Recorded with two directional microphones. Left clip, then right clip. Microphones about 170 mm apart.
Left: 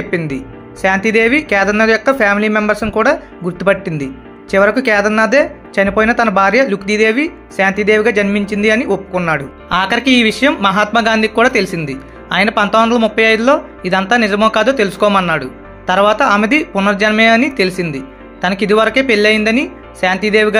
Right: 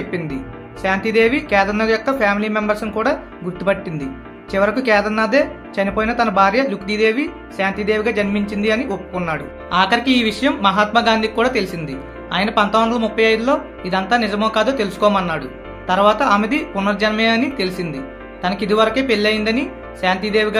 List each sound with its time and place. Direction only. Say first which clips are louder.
0.8 s speech: left 4 dB; 45° left (ahead or behind)